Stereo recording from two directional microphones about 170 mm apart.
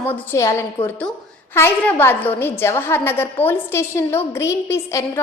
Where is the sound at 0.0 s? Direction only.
10° left (ahead or behind).